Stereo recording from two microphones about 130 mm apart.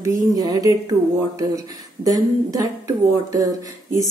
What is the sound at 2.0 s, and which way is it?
Speech, 30° right (ahead or behind).